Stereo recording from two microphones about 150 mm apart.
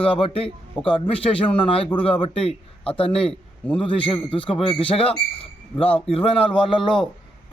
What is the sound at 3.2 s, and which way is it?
Speech, 5° left (ahead or behind).